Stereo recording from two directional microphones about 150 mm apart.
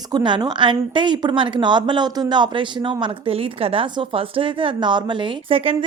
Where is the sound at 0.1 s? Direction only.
30° right (ahead or behind).